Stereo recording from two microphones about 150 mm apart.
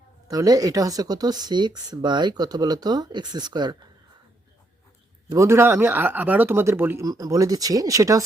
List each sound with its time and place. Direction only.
0.3 s speech: 25° right (ahead or behind)
5.3 s speech: 20° right (ahead or behind)